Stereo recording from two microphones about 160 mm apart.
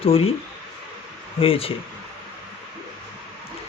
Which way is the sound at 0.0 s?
35° left (ahead or behind).